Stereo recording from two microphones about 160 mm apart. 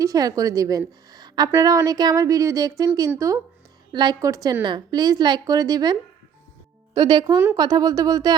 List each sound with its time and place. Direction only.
0.0 s a woman's voice: 20° right (ahead or behind)